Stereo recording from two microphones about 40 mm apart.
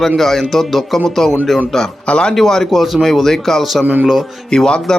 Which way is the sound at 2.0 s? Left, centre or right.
Left.